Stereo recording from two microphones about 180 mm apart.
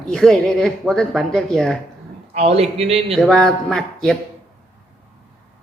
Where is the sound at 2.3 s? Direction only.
35° right (ahead or behind).